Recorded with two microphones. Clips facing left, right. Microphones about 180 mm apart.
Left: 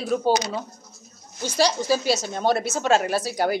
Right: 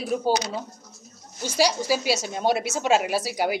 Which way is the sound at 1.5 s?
10° right (ahead or behind).